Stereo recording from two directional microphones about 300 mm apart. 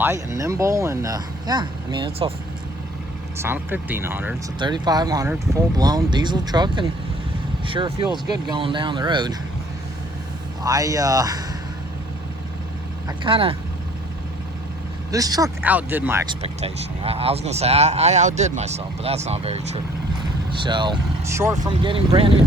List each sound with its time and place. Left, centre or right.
0.0 s speech: centre
3.3 s speech: centre
10.6 s speech: centre
13.1 s speech: centre
15.1 s speech: centre
16.4 s speech: right